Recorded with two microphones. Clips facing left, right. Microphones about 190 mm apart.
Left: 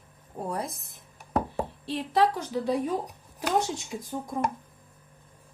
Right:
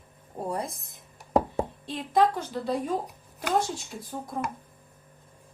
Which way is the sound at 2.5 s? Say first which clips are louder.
Left 2 dB; 10° left (ahead or behind).